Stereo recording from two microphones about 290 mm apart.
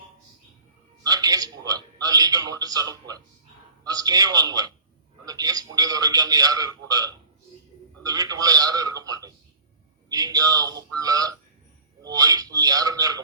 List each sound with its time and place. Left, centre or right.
1.0 s a man's voice: centre